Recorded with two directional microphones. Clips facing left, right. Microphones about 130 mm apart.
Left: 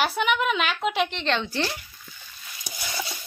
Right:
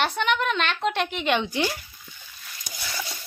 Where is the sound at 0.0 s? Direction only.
5° left (ahead or behind).